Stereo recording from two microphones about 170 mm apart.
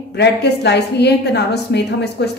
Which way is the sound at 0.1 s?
80° left.